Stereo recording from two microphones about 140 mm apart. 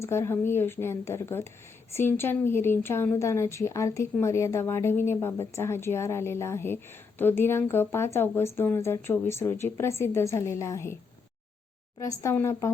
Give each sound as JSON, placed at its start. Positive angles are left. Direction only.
{"t": 0.0, "sound": "a woman's voice", "side_deg": 20}
{"t": 11.9, "sound": "a woman's voice", "side_deg": 20}